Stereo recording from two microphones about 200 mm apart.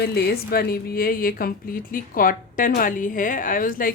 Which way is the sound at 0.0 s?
50° left (ahead or behind).